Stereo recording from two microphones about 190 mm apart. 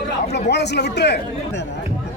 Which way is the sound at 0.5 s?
60° left (ahead or behind).